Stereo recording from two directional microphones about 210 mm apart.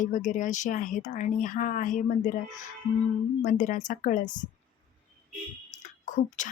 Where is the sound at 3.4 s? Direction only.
40° left (ahead or behind).